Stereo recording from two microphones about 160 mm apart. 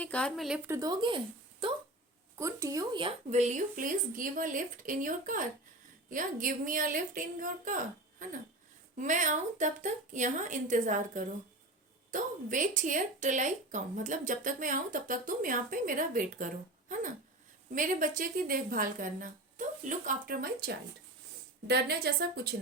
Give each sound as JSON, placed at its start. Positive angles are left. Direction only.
{"t": 0.0, "sound": "speech", "side_deg": 5}
{"t": 0.7, "sound": "speech", "side_deg": -25}
{"t": 2.4, "sound": "speech", "side_deg": -20}
{"t": 3.0, "sound": "speech", "side_deg": -40}
{"t": 9.0, "sound": "speech", "side_deg": -50}
{"t": 17.7, "sound": "speech", "side_deg": -55}
{"t": 21.7, "sound": "a woman's voice", "side_deg": -80}